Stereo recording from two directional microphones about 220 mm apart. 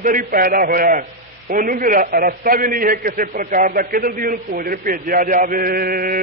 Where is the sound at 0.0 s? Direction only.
40° right (ahead or behind).